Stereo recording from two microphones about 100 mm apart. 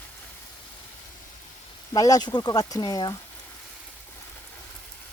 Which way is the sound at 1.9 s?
35° left (ahead or behind).